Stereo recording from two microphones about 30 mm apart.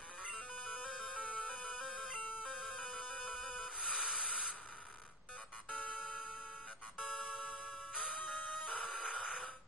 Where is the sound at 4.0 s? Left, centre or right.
Right.